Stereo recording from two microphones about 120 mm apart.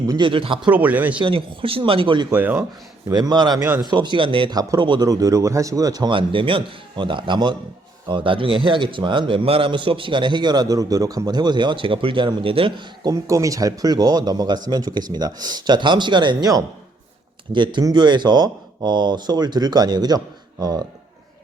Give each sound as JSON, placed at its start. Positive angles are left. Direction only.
{"t": 0.1, "sound": "speech", "side_deg": -45}
{"t": 0.7, "sound": "speech", "side_deg": -15}
{"t": 1.2, "sound": "speech", "side_deg": -45}
{"t": 2.3, "sound": "speech", "side_deg": -15}
{"t": 3.1, "sound": "a man's voice", "side_deg": -35}